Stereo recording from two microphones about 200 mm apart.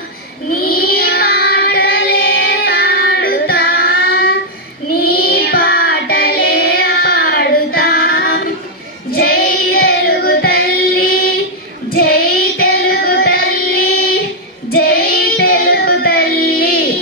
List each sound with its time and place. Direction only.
0.6 s child singing: 50° left (ahead or behind)